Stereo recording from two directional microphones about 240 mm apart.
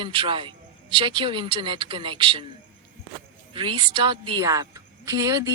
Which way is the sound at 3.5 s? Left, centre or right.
Centre.